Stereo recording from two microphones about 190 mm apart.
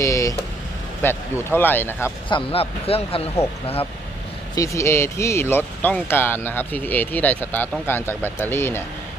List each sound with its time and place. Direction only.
0.0 s vehicle: 15° left (ahead or behind)
1.0 s speech: 10° left (ahead or behind)
2.3 s speech: 30° left (ahead or behind)
4.5 s speech: 15° left (ahead or behind)